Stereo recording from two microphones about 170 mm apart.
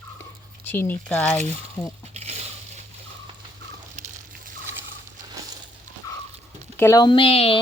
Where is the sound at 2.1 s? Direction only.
40° right (ahead or behind).